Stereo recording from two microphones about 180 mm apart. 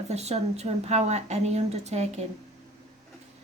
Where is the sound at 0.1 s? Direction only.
35° right (ahead or behind).